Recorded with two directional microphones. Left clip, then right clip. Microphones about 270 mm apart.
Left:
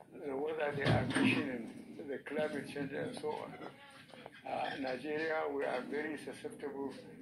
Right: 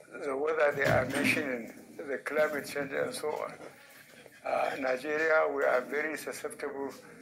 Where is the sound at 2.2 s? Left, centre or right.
Right.